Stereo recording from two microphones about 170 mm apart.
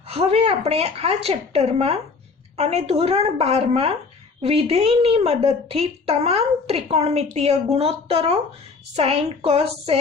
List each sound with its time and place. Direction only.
0.1 s a woman's voice: 35° right (ahead or behind)